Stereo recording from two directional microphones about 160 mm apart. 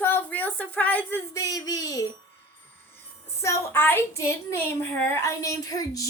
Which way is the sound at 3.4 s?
15° left (ahead or behind).